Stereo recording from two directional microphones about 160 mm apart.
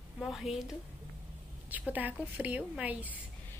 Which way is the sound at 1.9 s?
10° right (ahead or behind).